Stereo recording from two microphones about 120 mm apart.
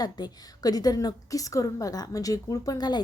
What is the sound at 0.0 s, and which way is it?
A woman's voice, 35° left (ahead or behind).